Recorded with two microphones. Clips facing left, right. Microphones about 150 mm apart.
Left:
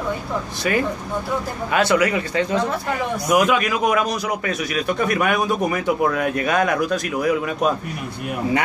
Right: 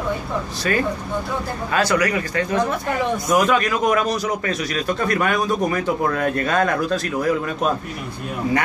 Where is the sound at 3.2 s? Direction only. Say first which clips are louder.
Left 1 dB; 10° left (ahead or behind).